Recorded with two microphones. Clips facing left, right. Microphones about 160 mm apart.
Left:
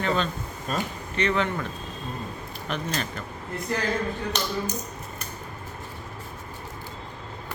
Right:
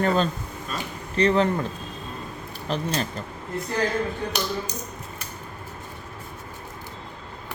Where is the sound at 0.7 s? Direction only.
40° left (ahead or behind).